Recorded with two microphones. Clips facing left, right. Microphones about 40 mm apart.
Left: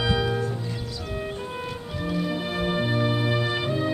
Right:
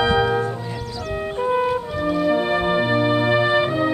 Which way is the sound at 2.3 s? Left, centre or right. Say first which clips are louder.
Right 8 dB; right.